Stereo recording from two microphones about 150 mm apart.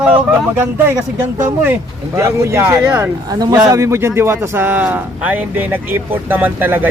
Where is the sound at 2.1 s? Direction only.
20° right (ahead or behind).